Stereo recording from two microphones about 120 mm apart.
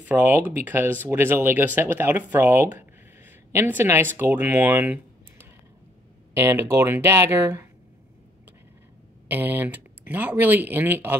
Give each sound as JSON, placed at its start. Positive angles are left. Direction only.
{"t": 0.0, "sound": "speech", "side_deg": -15}
{"t": 9.3, "sound": "speech", "side_deg": -15}